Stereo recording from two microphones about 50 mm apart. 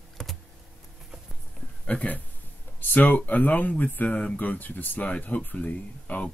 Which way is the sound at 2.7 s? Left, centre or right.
Left.